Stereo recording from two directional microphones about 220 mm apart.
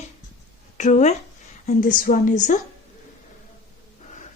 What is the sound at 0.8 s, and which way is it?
A woman's voice, 30° left (ahead or behind).